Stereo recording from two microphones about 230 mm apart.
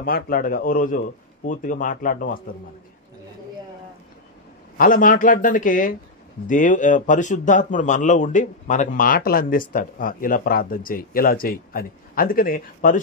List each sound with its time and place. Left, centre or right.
0.0 s a man's voice: left
4.7 s a man's voice: left